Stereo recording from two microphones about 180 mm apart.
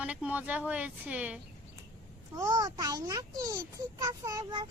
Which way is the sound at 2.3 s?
20° right (ahead or behind).